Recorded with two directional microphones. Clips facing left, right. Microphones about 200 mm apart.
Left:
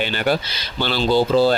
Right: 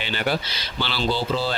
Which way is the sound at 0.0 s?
50° left (ahead or behind).